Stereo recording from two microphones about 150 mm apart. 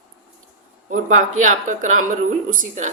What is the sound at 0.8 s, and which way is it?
Speech, 60° right (ahead or behind).